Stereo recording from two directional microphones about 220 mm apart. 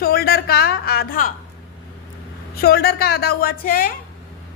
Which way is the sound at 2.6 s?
45° left (ahead or behind).